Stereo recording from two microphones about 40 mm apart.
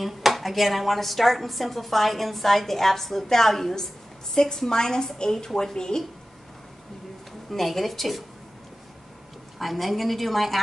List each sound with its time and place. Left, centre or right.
0.0 s a woman's voice: centre
5.8 s speech: centre
7.5 s a woman's voice: centre
9.6 s a woman's voice: centre